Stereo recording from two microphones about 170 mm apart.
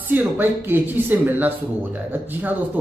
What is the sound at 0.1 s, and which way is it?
Speech, 10° right (ahead or behind).